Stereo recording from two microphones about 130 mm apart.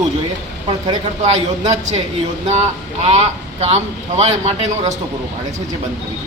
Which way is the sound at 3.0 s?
55° right (ahead or behind).